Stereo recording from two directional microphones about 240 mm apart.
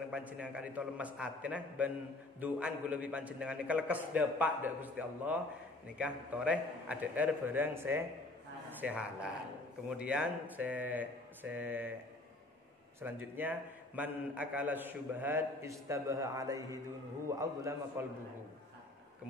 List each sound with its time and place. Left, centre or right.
0.1 s a man's voice: centre
13.0 s a man's voice: centre